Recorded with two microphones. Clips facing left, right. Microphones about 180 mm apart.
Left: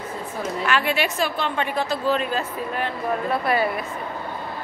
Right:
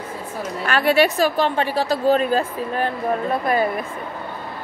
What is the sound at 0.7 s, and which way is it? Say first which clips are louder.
A woman's voice: right 7 dB; 40° right (ahead or behind).